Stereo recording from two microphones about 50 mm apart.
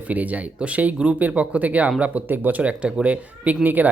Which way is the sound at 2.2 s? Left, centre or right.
Right.